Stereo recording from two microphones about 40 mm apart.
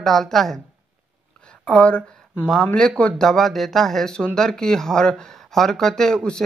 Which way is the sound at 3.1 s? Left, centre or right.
Centre.